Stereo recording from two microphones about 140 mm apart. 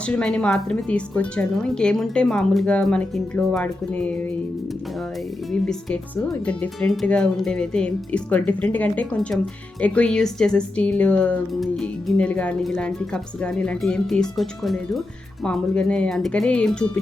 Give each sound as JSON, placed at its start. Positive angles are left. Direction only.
{"t": 0.0, "sound": "speech", "side_deg": 5}
{"t": 5.5, "sound": "speech", "side_deg": 5}